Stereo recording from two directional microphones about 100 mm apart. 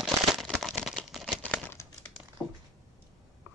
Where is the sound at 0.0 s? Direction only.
Centre (ahead or behind).